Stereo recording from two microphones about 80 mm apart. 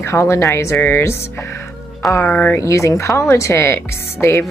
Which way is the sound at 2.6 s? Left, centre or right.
Left.